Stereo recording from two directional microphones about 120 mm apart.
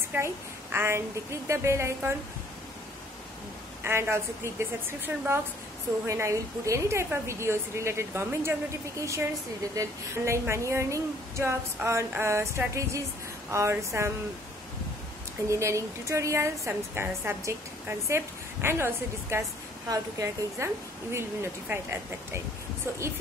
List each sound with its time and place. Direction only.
0.1 s a child's voice: 15° right (ahead or behind)
3.8 s a woman's voice: 20° right (ahead or behind)
15.4 s a woman's voice: 25° right (ahead or behind)